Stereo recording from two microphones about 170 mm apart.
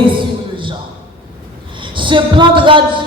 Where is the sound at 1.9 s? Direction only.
30° right (ahead or behind).